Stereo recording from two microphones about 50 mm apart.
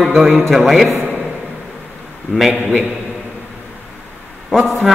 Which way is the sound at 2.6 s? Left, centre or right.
Right.